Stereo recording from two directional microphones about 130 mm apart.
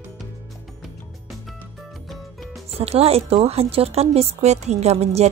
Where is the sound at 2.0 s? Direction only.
Centre (ahead or behind).